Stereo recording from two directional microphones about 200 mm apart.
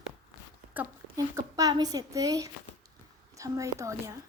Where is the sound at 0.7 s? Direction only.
15° right (ahead or behind).